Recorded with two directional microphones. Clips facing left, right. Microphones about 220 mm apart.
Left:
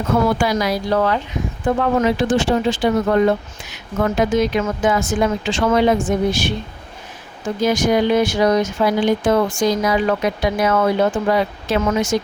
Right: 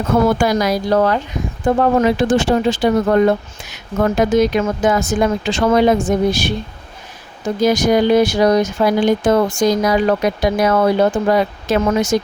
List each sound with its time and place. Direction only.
0.3 s speech: 45° right (ahead or behind)